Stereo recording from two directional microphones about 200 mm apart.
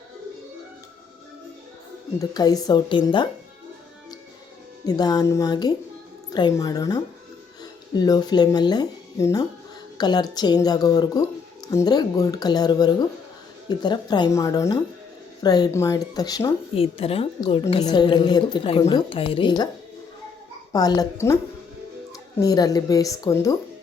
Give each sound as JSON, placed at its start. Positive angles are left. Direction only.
{"t": 2.1, "sound": "speech", "side_deg": 20}
{"t": 4.9, "sound": "speech", "side_deg": 20}
{"t": 20.7, "sound": "speech", "side_deg": 20}
{"t": 22.4, "sound": "a woman's voice", "side_deg": 20}